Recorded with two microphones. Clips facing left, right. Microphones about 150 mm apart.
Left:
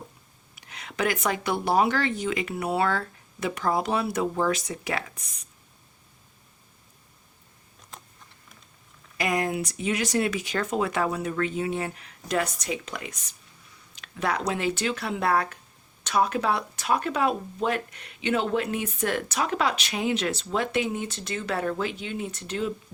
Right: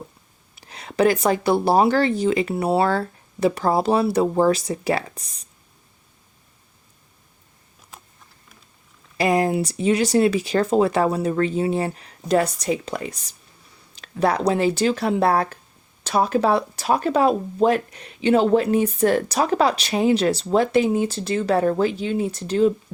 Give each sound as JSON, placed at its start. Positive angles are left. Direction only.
{"t": 0.5, "sound": "speech", "side_deg": -35}
{"t": 7.9, "sound": "a sound", "side_deg": -5}
{"t": 9.1, "sound": "speech", "side_deg": -30}